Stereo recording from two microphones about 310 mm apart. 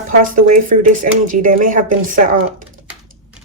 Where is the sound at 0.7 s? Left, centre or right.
Right.